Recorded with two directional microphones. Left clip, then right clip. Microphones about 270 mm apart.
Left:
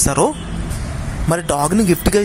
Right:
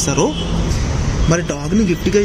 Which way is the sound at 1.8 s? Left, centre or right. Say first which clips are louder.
Even; left.